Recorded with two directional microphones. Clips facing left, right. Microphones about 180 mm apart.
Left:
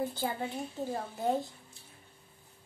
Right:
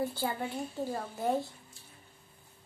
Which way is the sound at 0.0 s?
20° left (ahead or behind).